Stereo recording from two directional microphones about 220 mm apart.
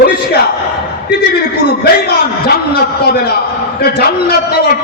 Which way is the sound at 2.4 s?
45° left (ahead or behind).